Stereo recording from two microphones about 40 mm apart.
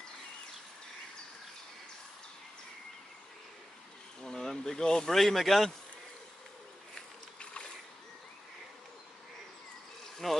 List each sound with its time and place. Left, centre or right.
4.2 s speech: centre
5.1 s speech: centre
7.0 s a sound: left
10.2 s speech: centre